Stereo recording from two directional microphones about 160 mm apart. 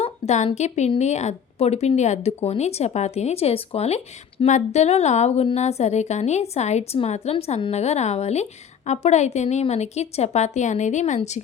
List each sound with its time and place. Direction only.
0.0 s speech: 40° left (ahead or behind)